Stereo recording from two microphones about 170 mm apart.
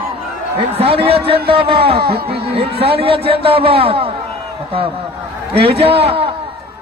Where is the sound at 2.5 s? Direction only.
35° right (ahead or behind).